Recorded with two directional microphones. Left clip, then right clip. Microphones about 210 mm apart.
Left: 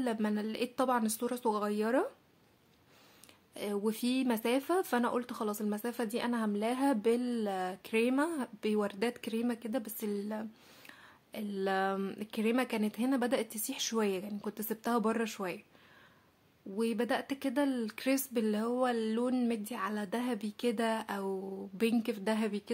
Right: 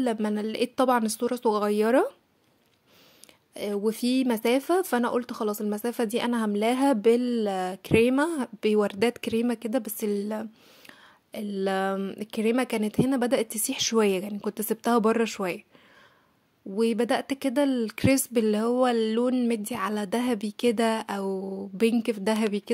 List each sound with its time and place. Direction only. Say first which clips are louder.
0.0 s speech: right 7 dB; 30° right (ahead or behind)
3.5 s speech: right 7 dB; 30° right (ahead or behind)
16.7 s speech: right 8 dB; 35° right (ahead or behind)